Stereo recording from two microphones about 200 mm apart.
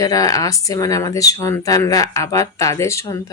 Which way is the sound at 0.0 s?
20° left (ahead or behind).